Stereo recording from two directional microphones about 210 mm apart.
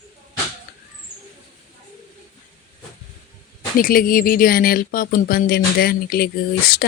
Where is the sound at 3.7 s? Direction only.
45° left (ahead or behind).